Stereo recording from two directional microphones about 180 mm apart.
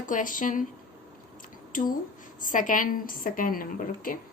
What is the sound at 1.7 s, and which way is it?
A woman's voice, 50° left (ahead or behind).